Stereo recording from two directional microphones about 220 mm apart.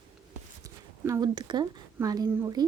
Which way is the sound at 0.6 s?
15° right (ahead or behind).